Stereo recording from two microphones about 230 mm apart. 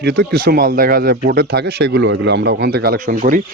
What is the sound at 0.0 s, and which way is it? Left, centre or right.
Speech, right.